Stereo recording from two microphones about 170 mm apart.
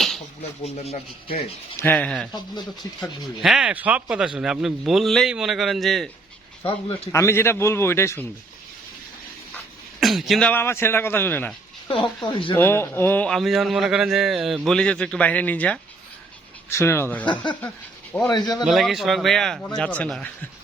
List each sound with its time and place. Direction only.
0.6 s speech: 40° left (ahead or behind)
1.7 s speech: 10° left (ahead or behind)
3.4 s a man's voice: 5° right (ahead or behind)
6.7 s speech: 35° left (ahead or behind)
7.1 s speech: 15° left (ahead or behind)
10.0 s a man's voice: centre (ahead or behind)
10.5 s speech: 15° left (ahead or behind)
12.2 s speech: 30° left (ahead or behind)
12.5 s a man's voice: 15° left (ahead or behind)
18.3 s speech: 25° left (ahead or behind)
18.6 s a man's voice: centre (ahead or behind)